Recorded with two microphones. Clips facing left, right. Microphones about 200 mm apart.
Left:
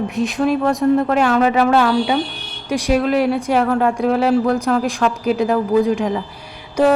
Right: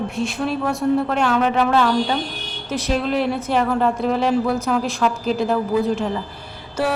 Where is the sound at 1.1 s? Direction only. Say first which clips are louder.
Left 4 dB; 5° left (ahead or behind).